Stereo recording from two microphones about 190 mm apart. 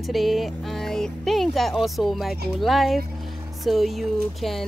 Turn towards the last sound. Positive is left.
turn(degrees=0)  # may be behind; listen again after turning